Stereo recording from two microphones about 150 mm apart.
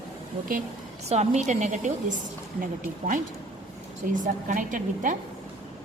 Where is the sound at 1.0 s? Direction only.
45° right (ahead or behind).